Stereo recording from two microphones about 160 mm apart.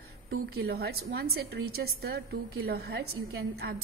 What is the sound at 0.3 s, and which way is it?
A woman's voice, 85° right.